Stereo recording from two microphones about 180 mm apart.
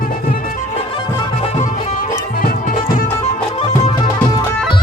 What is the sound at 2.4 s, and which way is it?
Music, 50° left (ahead or behind).